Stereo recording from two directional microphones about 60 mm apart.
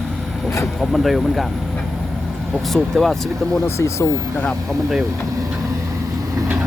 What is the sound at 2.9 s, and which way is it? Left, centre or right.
Speech, centre.